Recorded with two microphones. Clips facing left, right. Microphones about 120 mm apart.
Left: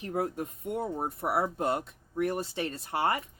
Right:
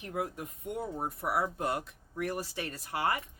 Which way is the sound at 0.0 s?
35° left (ahead or behind).